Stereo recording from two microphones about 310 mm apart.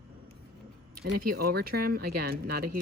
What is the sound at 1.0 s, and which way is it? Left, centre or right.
Speech, right.